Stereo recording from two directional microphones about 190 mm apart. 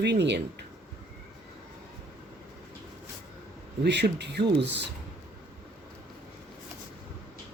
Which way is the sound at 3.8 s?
65° right (ahead or behind).